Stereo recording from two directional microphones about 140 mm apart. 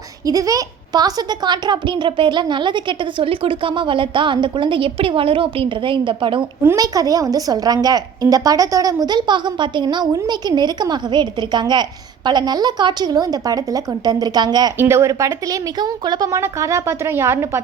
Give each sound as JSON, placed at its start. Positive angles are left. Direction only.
{"t": 0.3, "sound": "a woman's voice", "side_deg": -25}
{"t": 6.6, "sound": "a woman's voice", "side_deg": -20}
{"t": 14.8, "sound": "a woman's voice", "side_deg": -20}